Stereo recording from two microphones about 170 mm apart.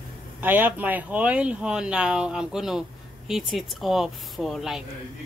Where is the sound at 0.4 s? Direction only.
10° right (ahead or behind).